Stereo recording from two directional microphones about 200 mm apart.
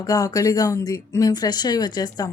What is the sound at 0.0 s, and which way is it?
A woman's voice, 15° left (ahead or behind).